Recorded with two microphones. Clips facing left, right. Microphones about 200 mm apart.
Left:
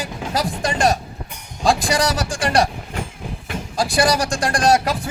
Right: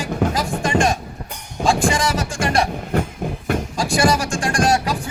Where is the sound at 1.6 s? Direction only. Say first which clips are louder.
Even; 35° left (ahead or behind).